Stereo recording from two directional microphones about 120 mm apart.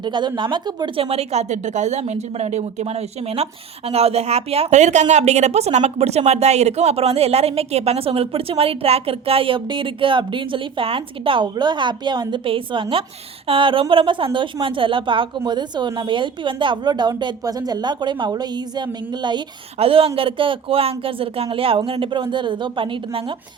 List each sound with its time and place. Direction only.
0.0 s a woman's voice: 40° right (ahead or behind)
19.8 s speech: 50° right (ahead or behind)